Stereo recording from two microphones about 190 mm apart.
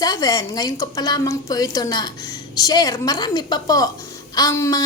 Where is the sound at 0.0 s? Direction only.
20° left (ahead or behind).